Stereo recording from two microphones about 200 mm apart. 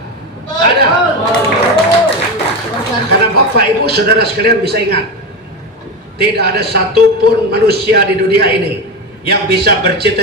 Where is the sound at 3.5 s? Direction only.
55° right (ahead or behind).